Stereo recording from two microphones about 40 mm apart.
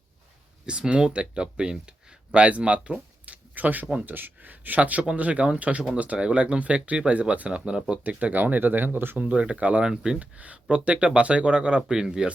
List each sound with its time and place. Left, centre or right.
0.6 s speech: right
3.5 s speech: right
7.1 s speech: right
8.0 s speech: right
9.3 s speech: right
9.8 s speech: centre
10.2 s speech: right; by 12.3 s centre